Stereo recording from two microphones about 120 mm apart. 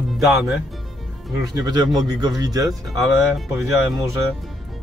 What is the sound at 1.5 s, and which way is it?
Speech, 35° right (ahead or behind).